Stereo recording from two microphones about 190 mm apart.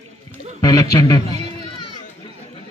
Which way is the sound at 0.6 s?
20° left (ahead or behind).